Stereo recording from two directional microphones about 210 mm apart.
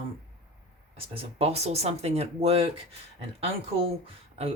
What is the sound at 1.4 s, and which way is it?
Speech, 30° right (ahead or behind).